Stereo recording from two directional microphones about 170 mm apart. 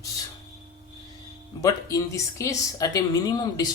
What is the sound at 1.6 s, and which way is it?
Speech, 20° left (ahead or behind).